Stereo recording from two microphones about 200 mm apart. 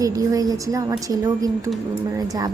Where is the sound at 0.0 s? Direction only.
15° right (ahead or behind).